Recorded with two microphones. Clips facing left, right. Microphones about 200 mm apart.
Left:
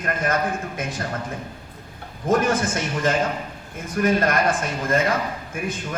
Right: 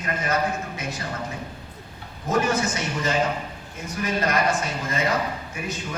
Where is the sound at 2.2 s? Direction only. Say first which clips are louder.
Left 3 dB; 50° left (ahead or behind).